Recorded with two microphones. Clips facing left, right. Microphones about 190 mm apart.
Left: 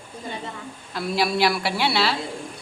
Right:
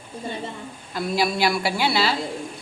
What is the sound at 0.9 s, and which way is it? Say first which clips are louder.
A woman's voice: even; centre (ahead or behind).